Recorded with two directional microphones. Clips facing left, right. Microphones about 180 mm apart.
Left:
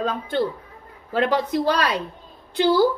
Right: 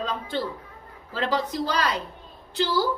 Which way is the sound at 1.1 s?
60° left (ahead or behind).